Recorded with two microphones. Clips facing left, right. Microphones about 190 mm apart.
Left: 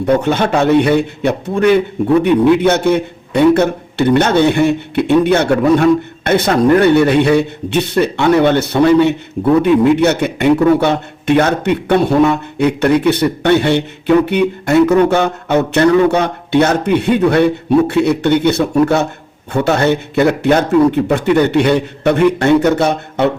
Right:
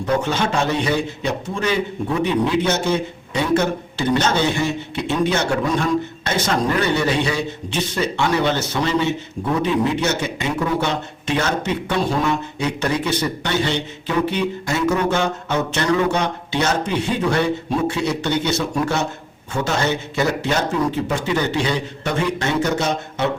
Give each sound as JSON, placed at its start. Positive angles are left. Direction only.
{"t": 0.2, "sound": "a man's voice", "side_deg": 60}